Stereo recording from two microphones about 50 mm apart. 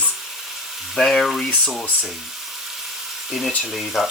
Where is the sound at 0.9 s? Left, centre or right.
Centre.